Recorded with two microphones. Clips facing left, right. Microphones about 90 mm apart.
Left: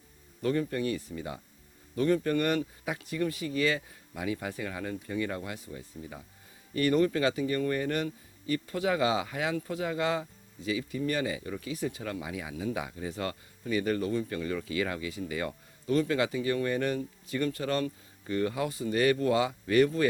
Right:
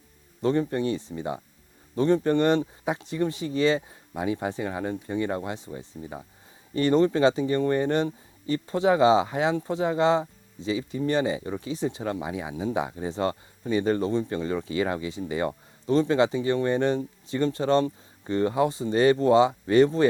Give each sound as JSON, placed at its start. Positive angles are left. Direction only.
{"t": 0.4, "sound": "speech", "side_deg": -30}